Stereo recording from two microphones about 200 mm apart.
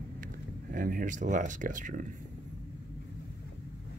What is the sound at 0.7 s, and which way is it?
Speech, 45° right (ahead or behind).